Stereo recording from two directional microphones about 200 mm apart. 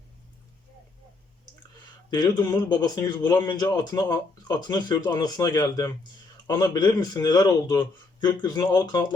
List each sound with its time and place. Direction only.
2.0 s speech: 20° left (ahead or behind)